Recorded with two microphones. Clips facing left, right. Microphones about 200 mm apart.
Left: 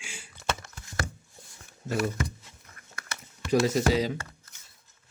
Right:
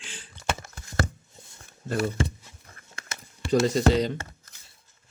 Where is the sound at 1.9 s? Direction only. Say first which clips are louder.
Right 2 dB; 30° right (ahead or behind).